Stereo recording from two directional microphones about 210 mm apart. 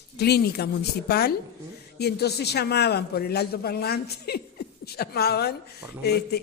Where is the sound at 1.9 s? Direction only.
50° left (ahead or behind).